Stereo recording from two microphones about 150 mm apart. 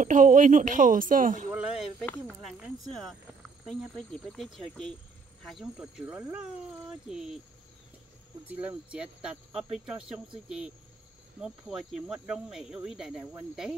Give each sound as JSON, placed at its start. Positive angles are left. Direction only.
{"t": 0.0, "sound": "speech", "side_deg": -60}
{"t": 1.5, "sound": "snake", "side_deg": -10}
{"t": 2.0, "sound": "speech", "side_deg": 5}
{"t": 8.5, "sound": "speech", "side_deg": -10}